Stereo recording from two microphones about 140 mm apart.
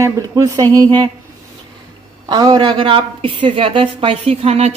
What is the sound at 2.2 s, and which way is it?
A woman's voice, 30° right (ahead or behind).